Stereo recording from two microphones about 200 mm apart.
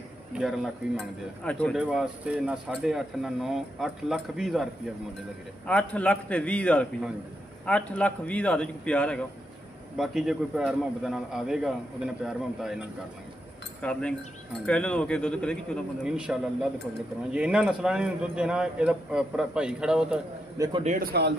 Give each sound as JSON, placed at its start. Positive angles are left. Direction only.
{"t": 0.3, "sound": "a man's voice", "side_deg": 0}
{"t": 5.7, "sound": "a man's voice", "side_deg": 5}
{"t": 20.5, "sound": "a man's voice", "side_deg": -15}
{"t": 20.8, "sound": "speech", "side_deg": -40}